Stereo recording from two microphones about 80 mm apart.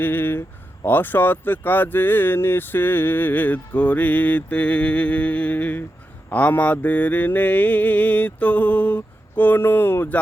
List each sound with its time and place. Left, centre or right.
0.0 s speech: left